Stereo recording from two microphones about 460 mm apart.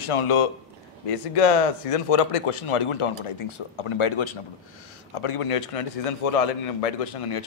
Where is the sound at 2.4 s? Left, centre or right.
Left.